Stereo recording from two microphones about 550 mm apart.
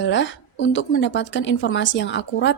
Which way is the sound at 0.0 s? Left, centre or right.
Centre.